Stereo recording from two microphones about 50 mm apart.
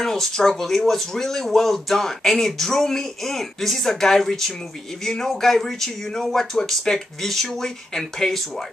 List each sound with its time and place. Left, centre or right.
0.0 s speech: centre